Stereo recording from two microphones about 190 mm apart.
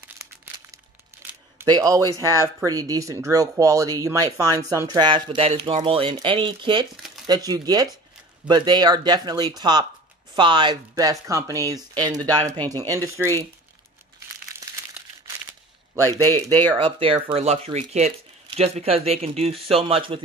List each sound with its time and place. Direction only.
1.1 s camera: 15° right (ahead or behind)
1.6 s speech: 20° right (ahead or behind)
14.6 s crumpling: 20° right (ahead or behind)
16.3 s speech: 10° left (ahead or behind)
16.6 s speech: 25° right (ahead or behind)